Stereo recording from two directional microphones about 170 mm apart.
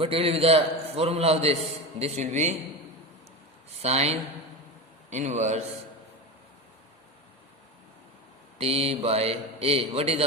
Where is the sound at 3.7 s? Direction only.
40° right (ahead or behind).